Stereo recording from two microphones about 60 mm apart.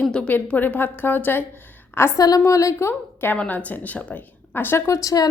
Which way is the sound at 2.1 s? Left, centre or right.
Left.